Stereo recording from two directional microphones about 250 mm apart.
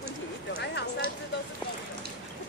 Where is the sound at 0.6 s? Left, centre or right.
Left.